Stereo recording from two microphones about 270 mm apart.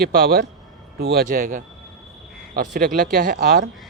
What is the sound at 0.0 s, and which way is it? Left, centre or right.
Speech, right.